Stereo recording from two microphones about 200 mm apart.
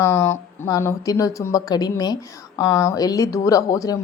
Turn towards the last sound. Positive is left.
turn(degrees=15)  # may be behind; listen again after turning